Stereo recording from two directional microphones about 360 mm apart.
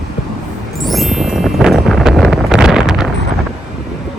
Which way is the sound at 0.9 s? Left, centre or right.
Centre.